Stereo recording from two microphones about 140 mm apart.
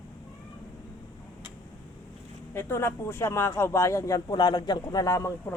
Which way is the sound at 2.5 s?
15° left (ahead or behind).